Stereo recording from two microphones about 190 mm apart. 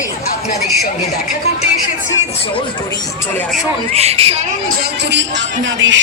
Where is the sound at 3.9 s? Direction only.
35° right (ahead or behind).